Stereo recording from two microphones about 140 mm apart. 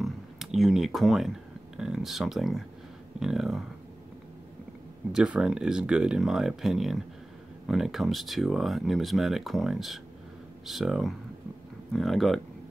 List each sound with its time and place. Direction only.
0.0 s a sound: centre (ahead or behind)
1.8 s speech: 5° right (ahead or behind)
5.1 s speech: 5° right (ahead or behind)